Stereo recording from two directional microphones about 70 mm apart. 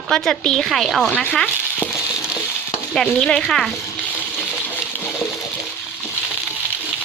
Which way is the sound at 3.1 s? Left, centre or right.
Centre.